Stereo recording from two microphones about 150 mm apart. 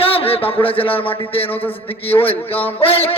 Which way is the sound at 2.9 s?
40° left (ahead or behind).